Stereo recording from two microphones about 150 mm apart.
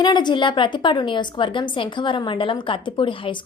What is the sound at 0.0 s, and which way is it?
A woman's voice, 30° left (ahead or behind).